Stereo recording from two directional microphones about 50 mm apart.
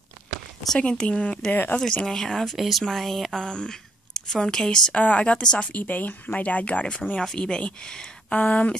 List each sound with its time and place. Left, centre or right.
0.7 s speech: left
1.5 s speech: left
1.8 s speech: centre
2.5 s speech: centre
3.3 s a woman's voice: centre
4.9 s speech: left
5.7 s speech: left
7.2 s speech: centre
8.3 s speech: left